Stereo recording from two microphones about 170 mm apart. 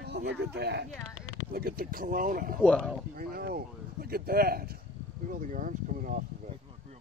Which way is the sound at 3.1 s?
60° right (ahead or behind).